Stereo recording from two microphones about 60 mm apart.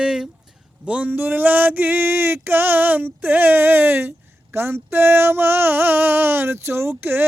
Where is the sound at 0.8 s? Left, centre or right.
Right.